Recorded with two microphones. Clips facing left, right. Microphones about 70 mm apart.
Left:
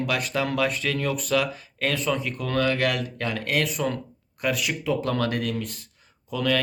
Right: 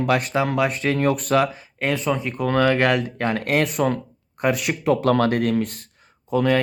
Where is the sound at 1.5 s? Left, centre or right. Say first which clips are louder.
Right 3 dB; right.